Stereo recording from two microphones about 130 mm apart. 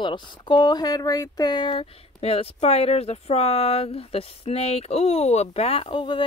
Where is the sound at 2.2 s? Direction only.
50° left (ahead or behind).